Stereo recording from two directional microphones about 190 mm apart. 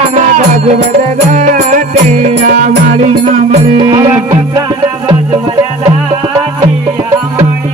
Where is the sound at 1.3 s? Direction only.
40° right (ahead or behind); by 4.0 s 20° right (ahead or behind).